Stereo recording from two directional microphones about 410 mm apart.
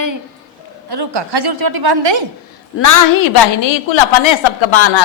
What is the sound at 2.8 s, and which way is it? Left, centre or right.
A woman's voice, left.